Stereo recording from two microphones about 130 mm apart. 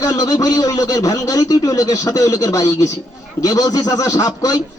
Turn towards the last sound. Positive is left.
turn(degrees=30)  # may be behind; listen again after turning